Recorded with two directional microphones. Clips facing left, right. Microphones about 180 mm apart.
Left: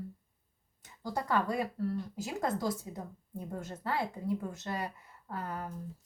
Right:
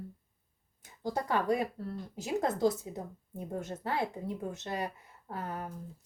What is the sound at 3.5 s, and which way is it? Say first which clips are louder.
Speech: right 1 dB; 20° right (ahead or behind).